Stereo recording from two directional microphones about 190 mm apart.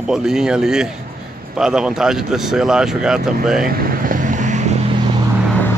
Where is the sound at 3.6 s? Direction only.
50° right (ahead or behind).